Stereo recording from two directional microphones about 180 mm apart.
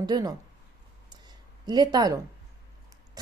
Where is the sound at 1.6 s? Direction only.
25° right (ahead or behind).